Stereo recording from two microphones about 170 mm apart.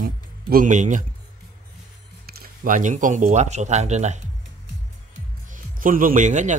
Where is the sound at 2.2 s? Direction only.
60° right (ahead or behind); by 4.2 s 40° right (ahead or behind).